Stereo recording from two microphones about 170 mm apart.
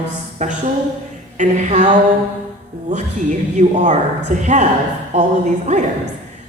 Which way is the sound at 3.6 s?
45° right (ahead or behind).